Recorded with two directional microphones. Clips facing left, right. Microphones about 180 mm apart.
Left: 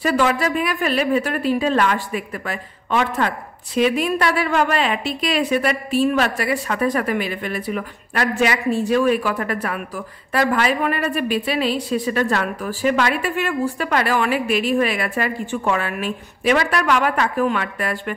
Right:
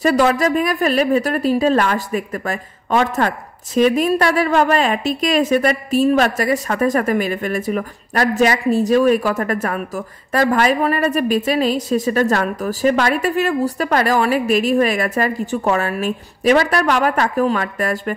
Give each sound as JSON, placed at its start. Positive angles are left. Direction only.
{"t": 0.0, "sound": "speech", "side_deg": -40}